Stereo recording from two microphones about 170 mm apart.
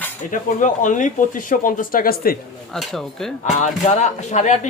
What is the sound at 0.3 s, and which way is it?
Speech, 50° left (ahead or behind).